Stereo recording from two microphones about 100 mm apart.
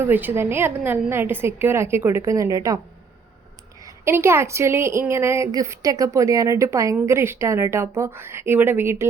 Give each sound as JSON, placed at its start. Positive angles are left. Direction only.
{"t": 0.0, "sound": "a woman's voice", "side_deg": -20}
{"t": 3.8, "sound": "a woman's voice", "side_deg": -25}